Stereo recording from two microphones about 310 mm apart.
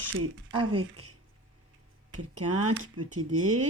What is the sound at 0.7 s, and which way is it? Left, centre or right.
Speech, right.